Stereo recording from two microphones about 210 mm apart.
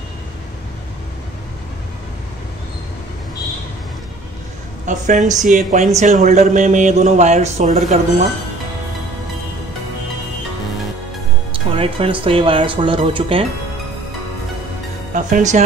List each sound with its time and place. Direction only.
4.8 s speech: 40° right (ahead or behind)
11.7 s speech: 25° right (ahead or behind)
15.1 s speech: 35° right (ahead or behind)